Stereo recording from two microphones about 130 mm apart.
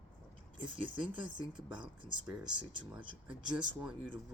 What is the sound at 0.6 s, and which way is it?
Speech, 40° right (ahead or behind).